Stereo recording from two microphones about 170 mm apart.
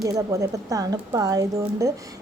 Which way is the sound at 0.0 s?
20° right (ahead or behind).